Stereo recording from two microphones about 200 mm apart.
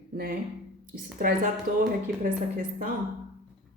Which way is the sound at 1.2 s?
45° right (ahead or behind).